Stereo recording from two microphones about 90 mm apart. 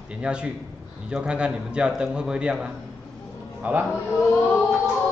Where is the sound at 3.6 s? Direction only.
20° right (ahead or behind).